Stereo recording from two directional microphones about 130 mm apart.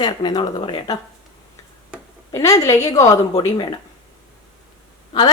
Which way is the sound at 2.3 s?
25° left (ahead or behind).